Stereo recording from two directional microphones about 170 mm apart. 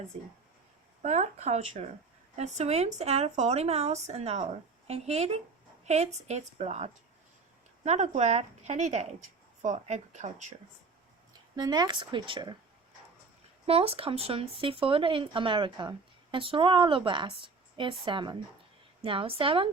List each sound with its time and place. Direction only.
1.0 s speech: 40° right (ahead or behind)
11.5 s speech: 25° right (ahead or behind)
13.7 s speech: 35° right (ahead or behind)